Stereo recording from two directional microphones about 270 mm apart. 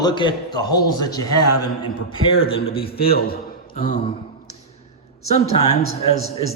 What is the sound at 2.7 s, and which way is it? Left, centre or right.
A man's voice, left.